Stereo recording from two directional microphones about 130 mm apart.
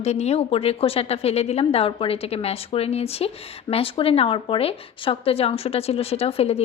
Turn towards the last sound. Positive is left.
turn(degrees=50)  # may be behind; listen again after turning